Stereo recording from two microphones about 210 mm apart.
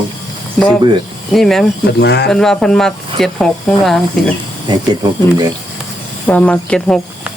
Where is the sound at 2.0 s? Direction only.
55° left (ahead or behind).